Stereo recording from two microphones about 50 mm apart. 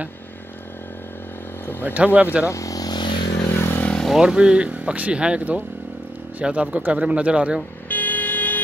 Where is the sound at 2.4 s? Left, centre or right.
Left.